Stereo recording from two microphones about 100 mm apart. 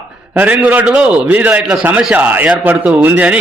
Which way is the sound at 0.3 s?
15° right (ahead or behind).